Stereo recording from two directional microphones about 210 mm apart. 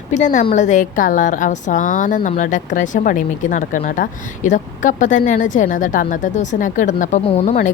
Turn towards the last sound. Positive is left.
turn(degrees=30)  # may be behind; listen again after turning